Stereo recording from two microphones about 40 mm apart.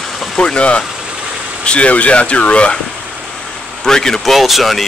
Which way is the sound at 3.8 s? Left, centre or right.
Centre.